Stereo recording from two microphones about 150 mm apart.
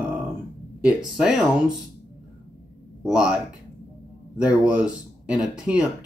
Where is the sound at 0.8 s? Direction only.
5° right (ahead or behind).